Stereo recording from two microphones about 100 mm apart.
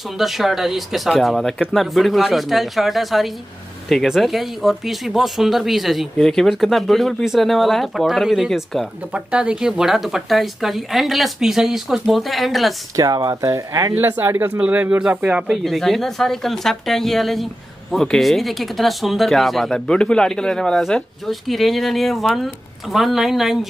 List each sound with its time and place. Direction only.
0.2 s speech: centre (ahead or behind)
12.9 s speech: 35° right (ahead or behind)
13.9 s speech: 20° right (ahead or behind); by 23.7 s centre (ahead or behind)